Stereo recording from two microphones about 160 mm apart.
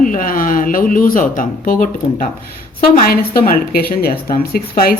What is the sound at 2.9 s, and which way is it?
A woman's voice, 65° left (ahead or behind).